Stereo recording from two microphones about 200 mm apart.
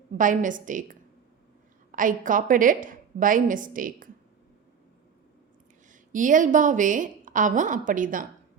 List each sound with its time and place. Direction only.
0.1 s a woman's voice: 40° right (ahead or behind)
5.9 s a woman's voice: 40° right (ahead or behind)